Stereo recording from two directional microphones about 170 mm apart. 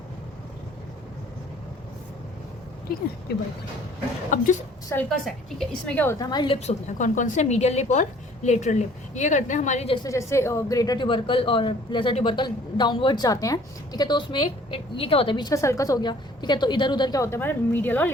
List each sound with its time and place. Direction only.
5.0 s a woman's voice: centre (ahead or behind)
6.1 s a woman's voice: 25° left (ahead or behind); by 9.9 s 45° left (ahead or behind)
9.9 s a woman's voice: 20° left (ahead or behind)